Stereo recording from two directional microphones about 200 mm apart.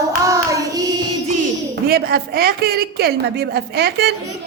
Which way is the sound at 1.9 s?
50° right (ahead or behind).